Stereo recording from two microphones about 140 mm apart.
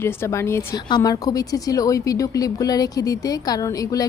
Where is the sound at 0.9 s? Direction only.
30° left (ahead or behind).